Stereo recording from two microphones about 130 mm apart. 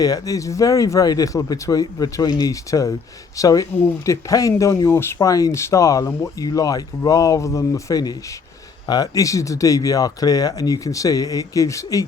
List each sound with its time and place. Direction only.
0.0 s speech: 25° left (ahead or behind)